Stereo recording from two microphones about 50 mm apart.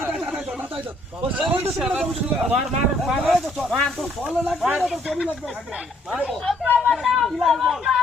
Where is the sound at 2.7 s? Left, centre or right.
Centre.